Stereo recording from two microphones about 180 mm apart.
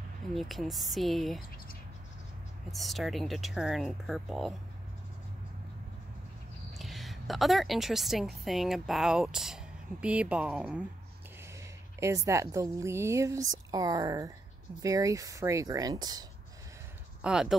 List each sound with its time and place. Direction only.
0.3 s speech: centre (ahead or behind)
2.7 s speech: centre (ahead or behind)
6.8 s a woman's voice: centre (ahead or behind)
12.0 s a woman's voice: 15° right (ahead or behind)
17.2 s speech: 5° right (ahead or behind)